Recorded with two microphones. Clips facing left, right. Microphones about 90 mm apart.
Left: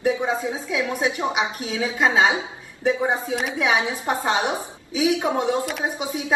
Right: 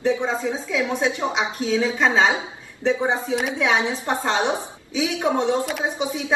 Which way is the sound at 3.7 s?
25° right (ahead or behind).